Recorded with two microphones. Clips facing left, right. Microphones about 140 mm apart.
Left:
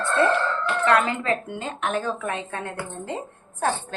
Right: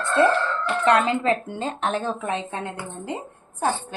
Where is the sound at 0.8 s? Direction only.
20° right (ahead or behind).